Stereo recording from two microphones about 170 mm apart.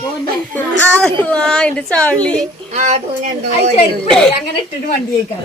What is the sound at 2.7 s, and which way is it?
Speech, 45° right (ahead or behind).